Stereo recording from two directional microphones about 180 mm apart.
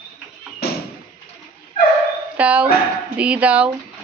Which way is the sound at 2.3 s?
5° right (ahead or behind).